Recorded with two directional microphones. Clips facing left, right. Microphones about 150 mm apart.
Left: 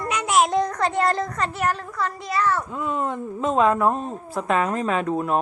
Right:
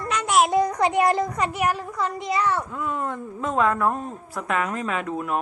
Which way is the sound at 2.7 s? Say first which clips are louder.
Left 2 dB; 20° left (ahead or behind).